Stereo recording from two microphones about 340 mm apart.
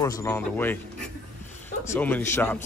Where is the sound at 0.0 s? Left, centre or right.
Centre.